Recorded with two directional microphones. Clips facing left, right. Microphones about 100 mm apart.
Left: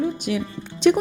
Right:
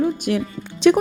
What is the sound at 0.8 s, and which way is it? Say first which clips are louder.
Speech: right 3 dB; 90° right.